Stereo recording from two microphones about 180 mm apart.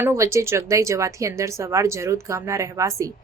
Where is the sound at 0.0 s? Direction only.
15° right (ahead or behind).